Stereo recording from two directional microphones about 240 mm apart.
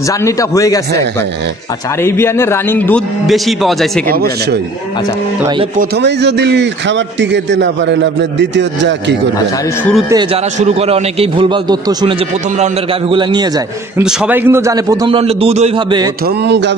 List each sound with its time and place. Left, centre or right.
0.2 s a man's voice: centre
2.0 s a man's voice: centre
4.1 s speech: right
5.8 s a man's voice: right
10.0 s a man's voice: centre
13.1 s a man's voice: centre
13.9 s a man's voice: centre; by 16.1 s right
16.4 s a man's voice: right